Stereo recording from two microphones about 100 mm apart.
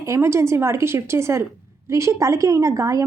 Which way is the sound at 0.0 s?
30° right (ahead or behind).